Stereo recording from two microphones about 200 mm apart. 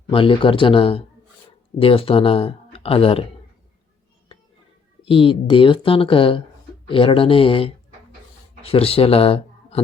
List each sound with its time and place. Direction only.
0.1 s speech: 25° left (ahead or behind)
5.0 s speech: 25° left (ahead or behind)